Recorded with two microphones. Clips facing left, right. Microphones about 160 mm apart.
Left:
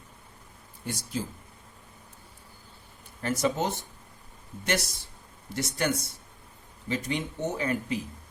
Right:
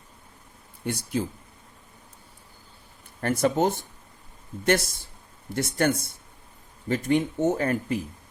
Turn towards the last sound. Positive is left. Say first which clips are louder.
# right 5 dB
turn(degrees=-50)  # may be behind; listen again after turning